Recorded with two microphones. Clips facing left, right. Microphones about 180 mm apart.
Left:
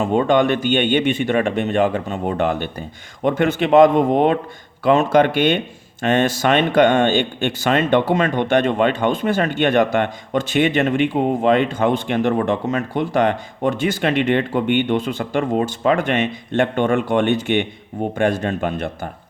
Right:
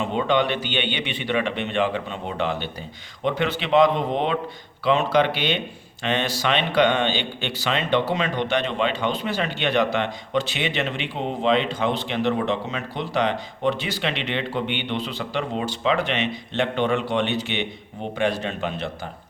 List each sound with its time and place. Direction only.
0.0 s speech: 45° left (ahead or behind)